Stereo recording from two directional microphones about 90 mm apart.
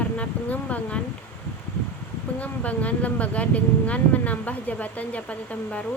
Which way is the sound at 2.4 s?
15° left (ahead or behind).